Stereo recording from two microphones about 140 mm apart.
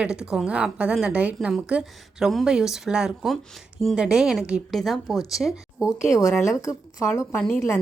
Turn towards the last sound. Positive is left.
turn(degrees=10)  # may be behind; listen again after turning